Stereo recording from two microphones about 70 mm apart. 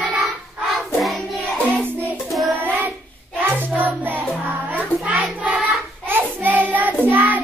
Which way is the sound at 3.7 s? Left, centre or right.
Right.